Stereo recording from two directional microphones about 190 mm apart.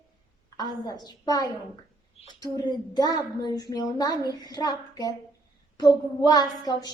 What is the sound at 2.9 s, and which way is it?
A woman's voice, 20° left (ahead or behind).